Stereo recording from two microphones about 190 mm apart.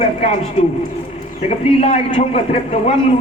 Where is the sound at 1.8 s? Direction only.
30° left (ahead or behind).